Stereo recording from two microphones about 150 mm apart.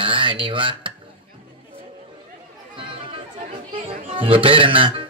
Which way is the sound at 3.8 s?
35° right (ahead or behind).